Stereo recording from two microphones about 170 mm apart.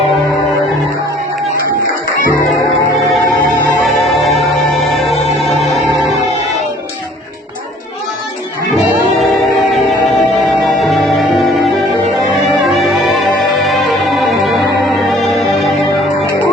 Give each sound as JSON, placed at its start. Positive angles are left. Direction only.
{"t": 3.8, "sound": "music", "side_deg": 0}
{"t": 9.6, "sound": "music", "side_deg": 0}